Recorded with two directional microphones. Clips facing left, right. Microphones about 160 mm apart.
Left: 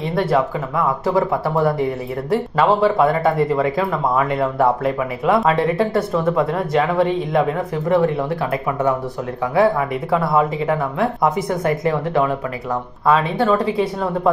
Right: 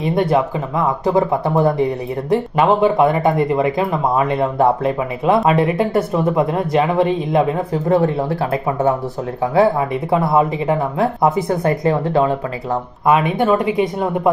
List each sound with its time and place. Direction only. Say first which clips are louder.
0.0 s speech: right 2 dB; 20° right (ahead or behind)
9.6 s speech: right 1 dB; 25° right (ahead or behind)